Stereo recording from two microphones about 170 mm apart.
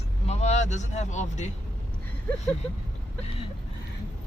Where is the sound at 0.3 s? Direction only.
40° left (ahead or behind).